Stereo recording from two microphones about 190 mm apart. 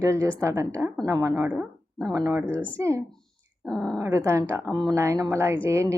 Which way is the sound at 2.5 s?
5° left (ahead or behind).